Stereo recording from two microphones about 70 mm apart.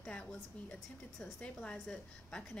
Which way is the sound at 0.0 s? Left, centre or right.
Centre.